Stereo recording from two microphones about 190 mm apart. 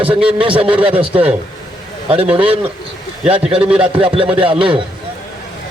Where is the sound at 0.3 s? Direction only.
25° right (ahead or behind).